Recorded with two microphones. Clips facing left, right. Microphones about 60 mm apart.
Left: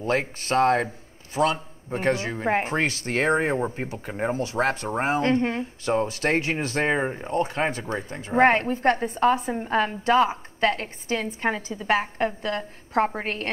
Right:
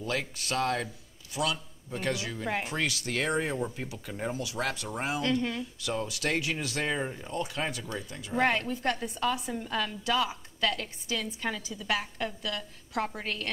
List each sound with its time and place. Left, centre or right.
0.0 s a man's voice: left